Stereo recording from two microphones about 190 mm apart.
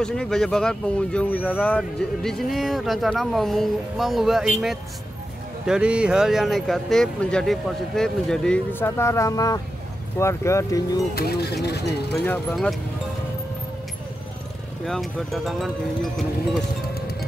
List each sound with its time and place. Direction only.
0.0 s speech: 5° left (ahead or behind)
11.1 s speech: 60° left (ahead or behind)
12.3 s speech: 5° left (ahead or behind)
14.9 s speech: centre (ahead or behind)